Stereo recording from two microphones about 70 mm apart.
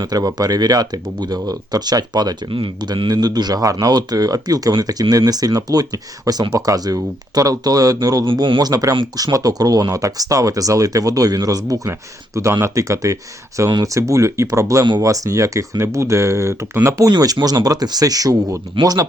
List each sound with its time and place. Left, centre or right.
0.0 s speech: right
11.9 s speech: right
17.1 s speech: right